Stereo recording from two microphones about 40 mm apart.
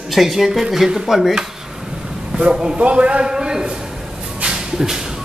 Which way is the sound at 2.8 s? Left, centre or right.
Right.